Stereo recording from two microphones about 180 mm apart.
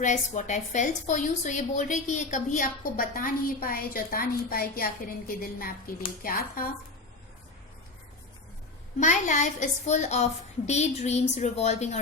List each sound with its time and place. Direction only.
0.0 s a woman's voice: 40° left (ahead or behind)
9.0 s a woman's voice: 45° left (ahead or behind)